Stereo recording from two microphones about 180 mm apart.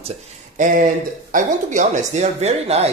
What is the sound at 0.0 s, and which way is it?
Speech, 40° right (ahead or behind).